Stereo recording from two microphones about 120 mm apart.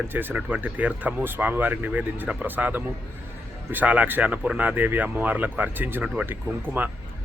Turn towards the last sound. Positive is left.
turn(degrees=-15)  # may be behind; listen again after turning